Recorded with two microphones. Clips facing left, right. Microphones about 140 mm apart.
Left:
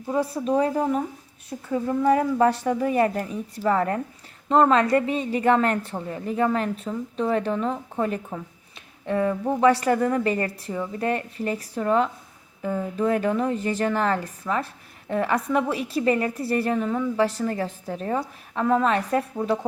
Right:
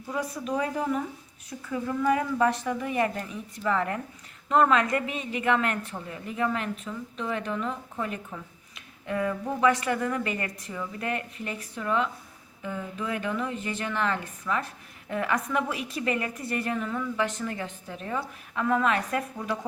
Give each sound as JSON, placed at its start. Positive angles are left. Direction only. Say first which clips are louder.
{"t": 0.1, "sound": "a woman's voice", "louder": "left 7 dB", "side_deg": 30}